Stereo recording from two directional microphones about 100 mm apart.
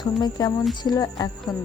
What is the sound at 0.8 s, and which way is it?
Speech, 40° left (ahead or behind).